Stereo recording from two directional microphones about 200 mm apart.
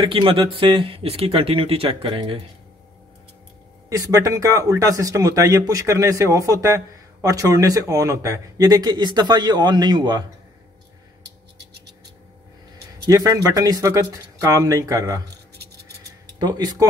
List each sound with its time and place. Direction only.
0.0 s speech: 25° right (ahead or behind)
3.9 s speech: 15° right (ahead or behind)
13.0 s speech: 15° right (ahead or behind)
16.3 s speech: 20° right (ahead or behind)